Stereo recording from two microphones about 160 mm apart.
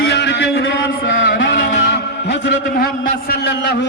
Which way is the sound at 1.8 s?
90° left.